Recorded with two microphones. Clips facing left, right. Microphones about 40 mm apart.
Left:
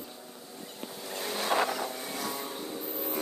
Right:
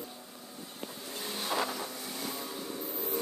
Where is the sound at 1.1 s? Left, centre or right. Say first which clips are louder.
Left 5 dB; left.